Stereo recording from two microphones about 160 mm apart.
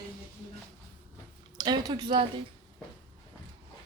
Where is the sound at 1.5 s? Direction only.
25° right (ahead or behind).